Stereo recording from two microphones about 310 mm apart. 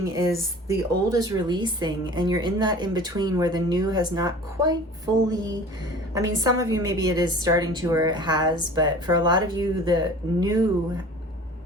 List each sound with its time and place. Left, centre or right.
0.3 s a woman's voice: centre